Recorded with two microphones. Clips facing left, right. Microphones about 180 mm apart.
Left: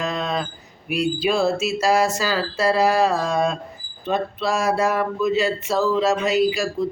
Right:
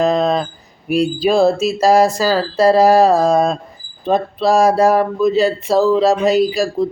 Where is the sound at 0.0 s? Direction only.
35° right (ahead or behind).